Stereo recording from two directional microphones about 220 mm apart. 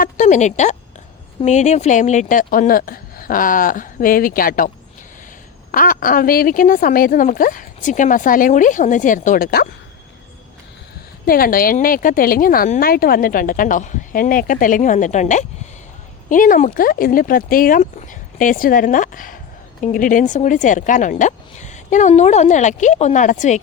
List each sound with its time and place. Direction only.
0.0 s a woman's voice: 35° left (ahead or behind)
5.7 s a woman's voice: 40° left (ahead or behind)
11.3 s a woman's voice: 40° left (ahead or behind)